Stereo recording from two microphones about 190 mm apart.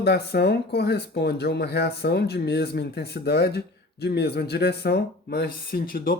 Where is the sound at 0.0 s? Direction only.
60° left (ahead or behind).